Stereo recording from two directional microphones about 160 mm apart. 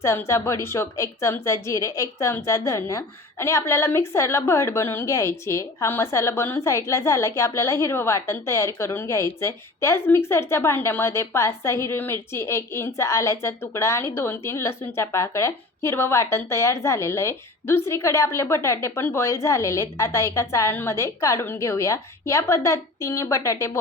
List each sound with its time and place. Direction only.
0.0 s a woman's voice: 15° left (ahead or behind)